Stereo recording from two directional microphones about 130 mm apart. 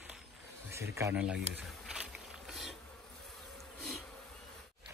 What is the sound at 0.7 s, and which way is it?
Speech, 20° right (ahead or behind).